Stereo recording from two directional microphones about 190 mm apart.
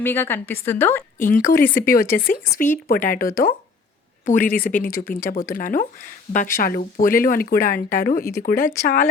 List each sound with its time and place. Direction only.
0.0 s a woman's voice: 10° left (ahead or behind)
1.2 s speech: 45° left (ahead or behind)
4.5 s speech: 50° left (ahead or behind)